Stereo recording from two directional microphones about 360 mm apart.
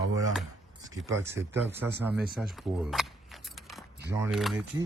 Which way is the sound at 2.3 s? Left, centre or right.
Centre.